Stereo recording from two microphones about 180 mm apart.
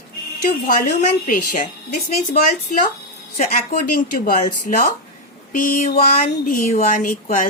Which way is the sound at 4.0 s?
50° left (ahead or behind).